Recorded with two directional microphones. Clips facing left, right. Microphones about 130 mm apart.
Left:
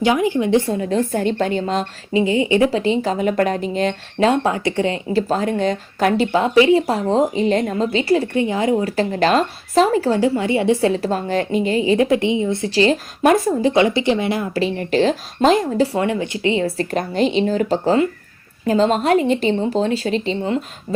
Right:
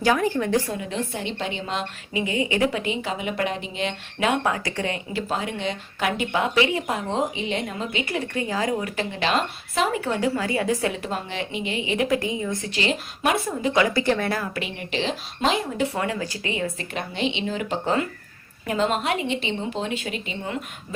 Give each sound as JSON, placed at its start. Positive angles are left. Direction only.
{"t": 0.0, "sound": "a woman's voice", "side_deg": 15}
{"t": 0.7, "sound": "a woman's voice", "side_deg": 40}
{"t": 2.1, "sound": "a woman's voice", "side_deg": 30}
{"t": 5.3, "sound": "a woman's voice", "side_deg": 40}
{"t": 9.0, "sound": "a woman's voice", "side_deg": 40}
{"t": 14.5, "sound": "a woman's voice", "side_deg": 35}
{"t": 16.0, "sound": "a woman's voice", "side_deg": 25}